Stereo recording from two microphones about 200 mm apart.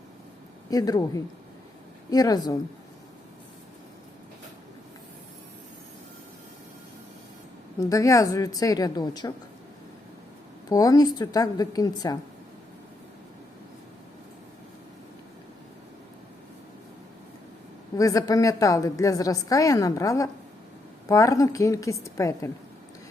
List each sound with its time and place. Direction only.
0.7 s a woman's voice: 20° left (ahead or behind)
7.8 s a woman's voice: 15° left (ahead or behind)
10.7 s a woman's voice: 20° left (ahead or behind)
17.9 s a woman's voice: 15° left (ahead or behind)